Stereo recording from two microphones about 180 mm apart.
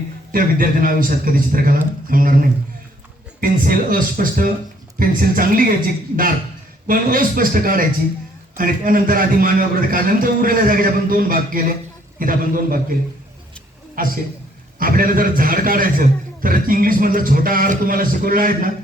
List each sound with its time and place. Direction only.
0.3 s a man's voice: 50° right (ahead or behind)
6.8 s a man's voice: 50° right (ahead or behind)
14.0 s a man's voice: 50° right (ahead or behind)